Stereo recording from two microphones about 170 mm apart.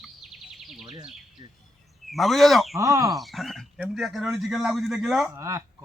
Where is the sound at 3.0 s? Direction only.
Centre (ahead or behind).